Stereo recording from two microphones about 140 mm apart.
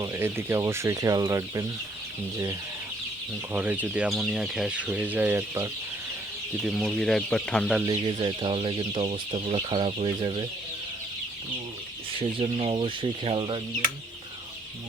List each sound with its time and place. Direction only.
0.0 s speech: 20° right (ahead or behind)
3.5 s speech: 10° right (ahead or behind)
6.6 s speech: centre (ahead or behind)
7.9 s speech: 35° right (ahead or behind)
12.2 s speech: 45° right (ahead or behind)